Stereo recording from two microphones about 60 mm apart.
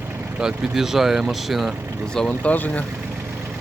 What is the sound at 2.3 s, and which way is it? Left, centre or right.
Speech, left.